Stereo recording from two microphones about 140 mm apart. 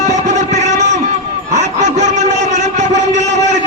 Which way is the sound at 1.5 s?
60° right (ahead or behind).